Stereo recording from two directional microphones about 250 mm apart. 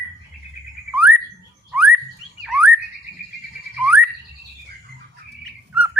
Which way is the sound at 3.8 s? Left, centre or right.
Centre.